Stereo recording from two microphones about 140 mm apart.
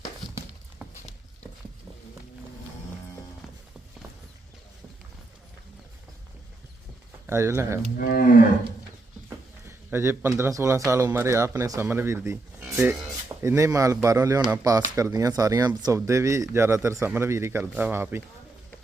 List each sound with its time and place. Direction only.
7.3 s speech: 20° right (ahead or behind)
7.9 s cattle: 90° left
9.3 s a sound: 20° right (ahead or behind)
10.9 s speech: 20° right (ahead or behind)
13.2 s a sound: 20° right (ahead or behind)
13.7 s speech: 20° right (ahead or behind)